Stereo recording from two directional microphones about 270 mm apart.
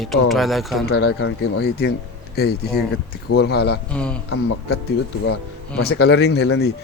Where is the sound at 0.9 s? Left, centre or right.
Left.